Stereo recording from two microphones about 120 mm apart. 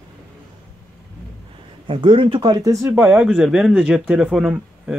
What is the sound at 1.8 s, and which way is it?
Speech, 45° right (ahead or behind).